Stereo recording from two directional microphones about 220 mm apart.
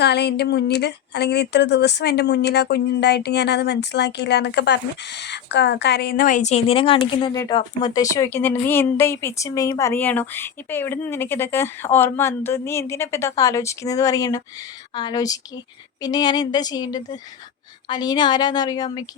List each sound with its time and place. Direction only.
0.0 s speech: 50° left (ahead or behind); by 19.0 s 20° left (ahead or behind)